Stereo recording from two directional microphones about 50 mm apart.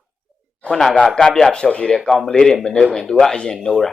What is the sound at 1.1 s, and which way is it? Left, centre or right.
Speech, centre.